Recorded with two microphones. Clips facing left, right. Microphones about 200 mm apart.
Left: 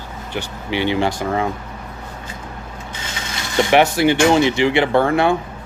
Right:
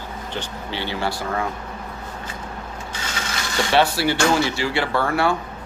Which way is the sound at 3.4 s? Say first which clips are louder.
Left 5 dB; 20° left (ahead or behind).